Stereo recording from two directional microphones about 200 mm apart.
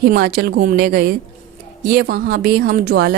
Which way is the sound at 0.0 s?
50° right (ahead or behind).